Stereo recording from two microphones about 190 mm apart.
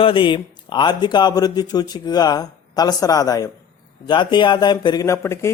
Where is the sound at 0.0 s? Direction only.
25° left (ahead or behind).